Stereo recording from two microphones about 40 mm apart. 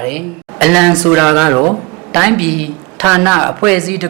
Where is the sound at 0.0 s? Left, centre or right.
Centre.